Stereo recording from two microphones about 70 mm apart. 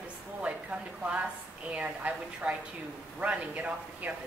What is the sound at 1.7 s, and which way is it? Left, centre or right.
A woman's voice, right.